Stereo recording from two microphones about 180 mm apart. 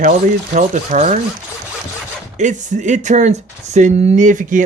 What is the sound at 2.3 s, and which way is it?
Speech, 40° right (ahead or behind).